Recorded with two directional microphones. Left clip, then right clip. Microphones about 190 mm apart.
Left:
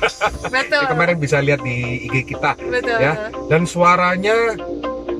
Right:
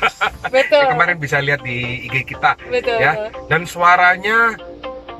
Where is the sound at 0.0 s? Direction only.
5° left (ahead or behind).